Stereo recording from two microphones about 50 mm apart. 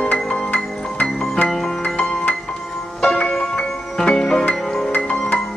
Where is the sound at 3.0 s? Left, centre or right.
Left.